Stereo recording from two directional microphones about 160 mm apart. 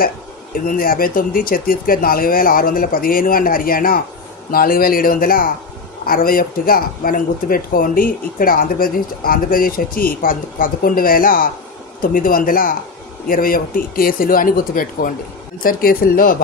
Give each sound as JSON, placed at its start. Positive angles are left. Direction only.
{"t": 0.7, "sound": "speech", "side_deg": 65}